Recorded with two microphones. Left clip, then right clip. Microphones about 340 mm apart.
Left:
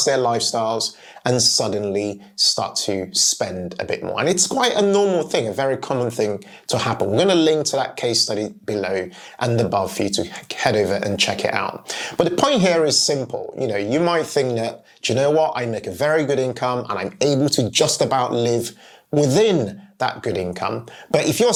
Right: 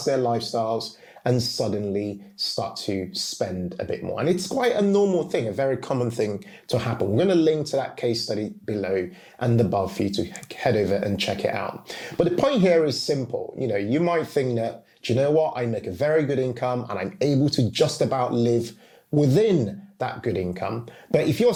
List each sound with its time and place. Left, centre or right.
0.3 s speech: left
5.9 s speech: left
6.7 s speech: left